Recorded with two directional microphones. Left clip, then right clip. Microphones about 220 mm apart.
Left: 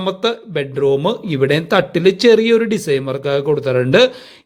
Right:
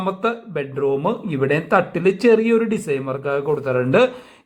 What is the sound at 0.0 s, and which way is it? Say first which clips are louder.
Speech: left 3 dB; 30° left (ahead or behind).